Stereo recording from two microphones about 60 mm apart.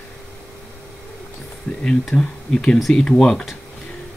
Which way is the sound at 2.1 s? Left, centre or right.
Centre.